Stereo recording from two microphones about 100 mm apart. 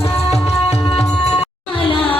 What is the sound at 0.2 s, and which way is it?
Music, 90° left.